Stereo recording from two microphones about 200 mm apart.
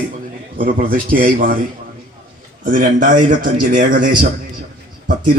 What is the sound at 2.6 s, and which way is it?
A man's voice, 40° right (ahead or behind).